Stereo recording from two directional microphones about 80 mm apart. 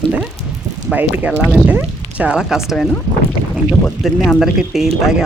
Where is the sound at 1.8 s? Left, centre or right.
Centre.